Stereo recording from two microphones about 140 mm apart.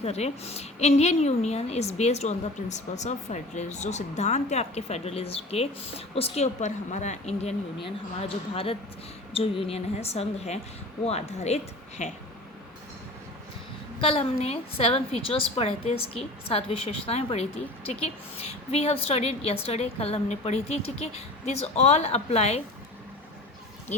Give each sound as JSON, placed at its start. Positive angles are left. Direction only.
{"t": 0.0, "sound": "a woman's voice", "side_deg": 50}
{"t": 7.9, "sound": "a woman's voice", "side_deg": 45}
{"t": 14.0, "sound": "a woman's voice", "side_deg": 45}